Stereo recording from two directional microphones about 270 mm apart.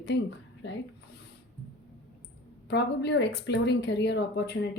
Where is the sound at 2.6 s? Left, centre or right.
Left.